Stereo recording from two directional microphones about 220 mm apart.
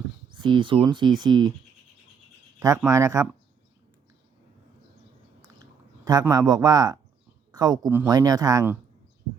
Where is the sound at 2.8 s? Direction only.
15° right (ahead or behind).